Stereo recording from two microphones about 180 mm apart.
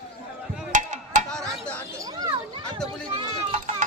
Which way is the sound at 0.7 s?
45° right (ahead or behind).